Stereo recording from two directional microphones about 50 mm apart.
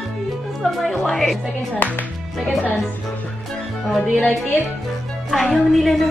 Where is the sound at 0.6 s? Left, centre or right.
Centre.